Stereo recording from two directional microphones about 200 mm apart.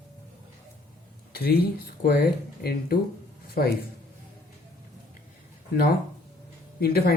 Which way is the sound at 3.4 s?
50° left (ahead or behind).